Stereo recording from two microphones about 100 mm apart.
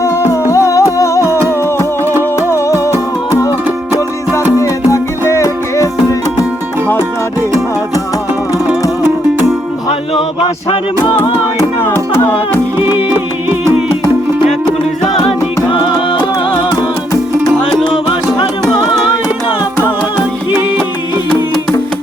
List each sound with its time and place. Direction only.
0.0 s music: 30° left (ahead or behind)
4.5 s music: 30° left (ahead or behind)